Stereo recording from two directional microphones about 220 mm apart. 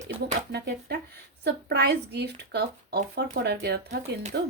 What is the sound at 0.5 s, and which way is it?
Speech, 50° right (ahead or behind).